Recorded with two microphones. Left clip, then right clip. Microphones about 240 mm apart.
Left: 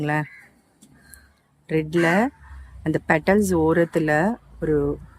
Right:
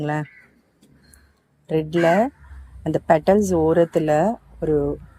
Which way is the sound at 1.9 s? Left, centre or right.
Centre.